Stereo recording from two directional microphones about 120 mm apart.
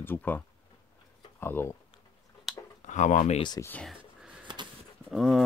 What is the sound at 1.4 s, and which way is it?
Speech, 20° left (ahead or behind).